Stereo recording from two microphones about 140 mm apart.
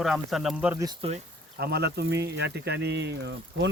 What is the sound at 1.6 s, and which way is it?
Speech, 90° right.